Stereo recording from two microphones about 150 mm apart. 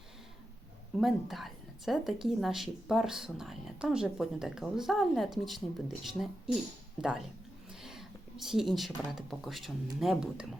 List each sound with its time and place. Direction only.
0.9 s speech: centre (ahead or behind)
7.7 s a sound: 5° right (ahead or behind)
9.0 s speech: centre (ahead or behind)